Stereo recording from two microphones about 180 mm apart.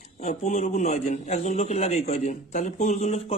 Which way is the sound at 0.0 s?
40° left (ahead or behind).